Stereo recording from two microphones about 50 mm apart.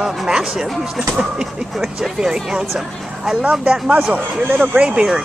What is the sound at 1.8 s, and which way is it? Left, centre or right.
Speech, centre.